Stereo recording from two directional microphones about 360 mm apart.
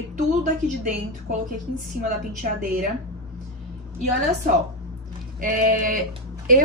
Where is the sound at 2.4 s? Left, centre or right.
Right.